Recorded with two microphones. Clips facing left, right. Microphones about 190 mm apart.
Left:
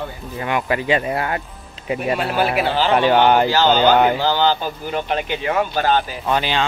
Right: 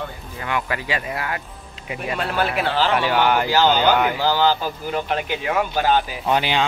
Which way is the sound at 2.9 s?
25° left (ahead or behind).